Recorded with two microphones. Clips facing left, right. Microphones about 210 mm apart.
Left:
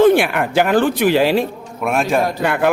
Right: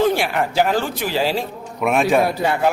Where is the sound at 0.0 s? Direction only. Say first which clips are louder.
Left 6 dB; 60° left (ahead or behind).